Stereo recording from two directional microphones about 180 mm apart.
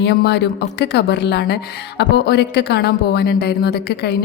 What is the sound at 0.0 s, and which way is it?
A woman's voice, 65° left (ahead or behind).